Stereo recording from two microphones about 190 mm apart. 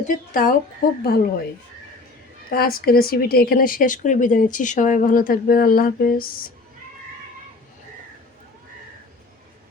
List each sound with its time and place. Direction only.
0.1 s speech: 45° left (ahead or behind)
2.5 s speech: 50° left (ahead or behind)